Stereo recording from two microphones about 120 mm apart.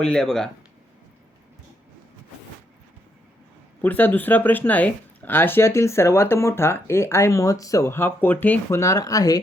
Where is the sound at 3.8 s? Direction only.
15° left (ahead or behind).